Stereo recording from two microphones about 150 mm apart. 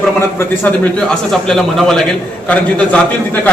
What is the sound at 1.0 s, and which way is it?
A man's voice, centre (ahead or behind).